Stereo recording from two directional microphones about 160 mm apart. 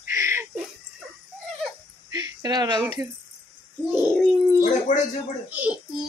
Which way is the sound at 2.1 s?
25° right (ahead or behind).